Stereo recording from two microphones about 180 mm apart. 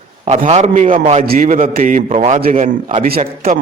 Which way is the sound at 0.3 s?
40° right (ahead or behind).